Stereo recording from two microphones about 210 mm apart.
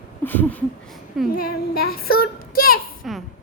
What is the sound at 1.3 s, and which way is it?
Speech, 45° left (ahead or behind).